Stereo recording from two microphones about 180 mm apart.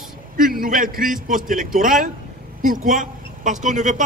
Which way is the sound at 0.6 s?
50° right (ahead or behind).